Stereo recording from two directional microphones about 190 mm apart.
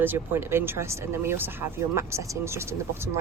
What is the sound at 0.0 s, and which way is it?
Speech, 10° right (ahead or behind).